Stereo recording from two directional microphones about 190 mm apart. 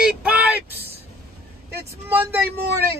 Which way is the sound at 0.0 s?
5° right (ahead or behind).